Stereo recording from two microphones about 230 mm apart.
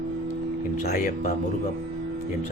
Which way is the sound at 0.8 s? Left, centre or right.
Left.